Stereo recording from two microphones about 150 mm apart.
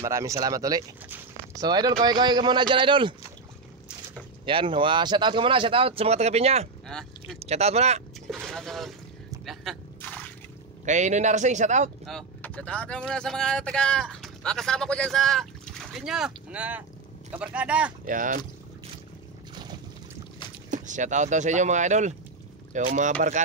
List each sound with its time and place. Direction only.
0.0 s speech: 20° right (ahead or behind)
4.5 s speech: 35° right (ahead or behind)
8.5 s speech: centre (ahead or behind)
10.0 s a sound: 10° left (ahead or behind)
10.9 s speech: 50° right (ahead or behind)
12.1 s speech: 5° left (ahead or behind); by 17.9 s 10° right (ahead or behind)
18.0 s speech: 65° right (ahead or behind)
19.5 s boat: 30° right (ahead or behind)
20.7 s speech: 55° right (ahead or behind)